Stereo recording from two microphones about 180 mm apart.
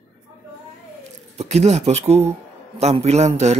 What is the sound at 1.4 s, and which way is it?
Speech, 35° right (ahead or behind).